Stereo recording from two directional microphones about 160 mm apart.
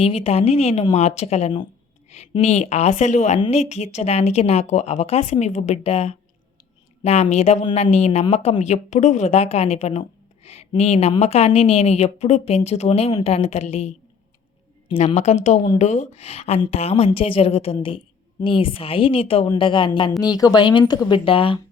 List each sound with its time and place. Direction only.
0.0 s a woman's voice: 40° left (ahead or behind)
2.0 s a sound: 45° left (ahead or behind)
2.4 s a woman's voice: 45° left (ahead or behind)